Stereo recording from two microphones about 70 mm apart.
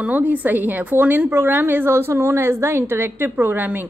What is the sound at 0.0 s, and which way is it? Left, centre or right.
A woman's voice, right.